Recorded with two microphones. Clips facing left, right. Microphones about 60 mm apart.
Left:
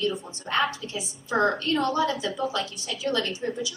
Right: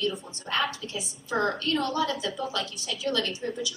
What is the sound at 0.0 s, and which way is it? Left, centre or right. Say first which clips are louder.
A woman's voice: left 2 dB; left.